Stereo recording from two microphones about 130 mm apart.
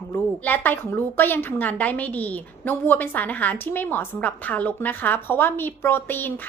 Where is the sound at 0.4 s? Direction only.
15° left (ahead or behind).